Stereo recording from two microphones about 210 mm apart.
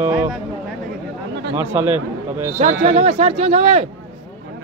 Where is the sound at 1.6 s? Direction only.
10° right (ahead or behind).